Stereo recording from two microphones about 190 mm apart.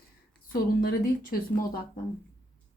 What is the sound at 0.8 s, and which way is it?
Speech, 50° left (ahead or behind).